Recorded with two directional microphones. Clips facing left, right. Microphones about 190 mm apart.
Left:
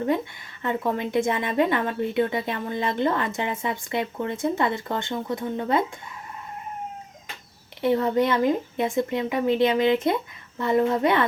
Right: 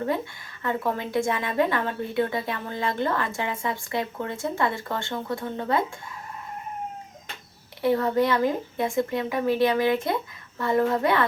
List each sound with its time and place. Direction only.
0.6 s a woman's voice: 20° left (ahead or behind)
7.8 s a woman's voice: 20° left (ahead or behind)